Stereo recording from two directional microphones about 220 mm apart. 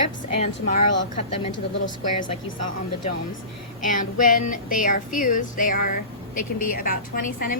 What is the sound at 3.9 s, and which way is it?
Speech, 35° left (ahead or behind).